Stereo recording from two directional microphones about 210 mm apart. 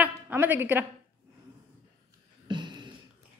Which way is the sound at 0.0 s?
10° right (ahead or behind).